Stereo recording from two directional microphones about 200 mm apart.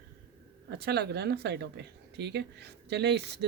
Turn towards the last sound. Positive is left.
turn(degrees=-55)  # may be behind; listen again after turning